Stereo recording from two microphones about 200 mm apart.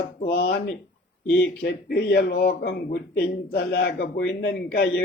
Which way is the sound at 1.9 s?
55° left (ahead or behind).